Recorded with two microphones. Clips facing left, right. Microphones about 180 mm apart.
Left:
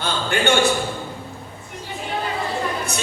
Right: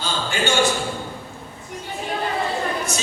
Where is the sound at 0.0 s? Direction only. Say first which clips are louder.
Left 3 dB; 60° left (ahead or behind).